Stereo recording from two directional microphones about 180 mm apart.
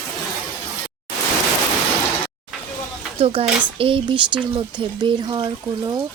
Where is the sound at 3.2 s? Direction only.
30° right (ahead or behind).